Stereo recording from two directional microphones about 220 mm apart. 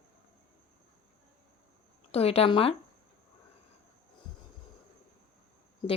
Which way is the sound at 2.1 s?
25° left (ahead or behind).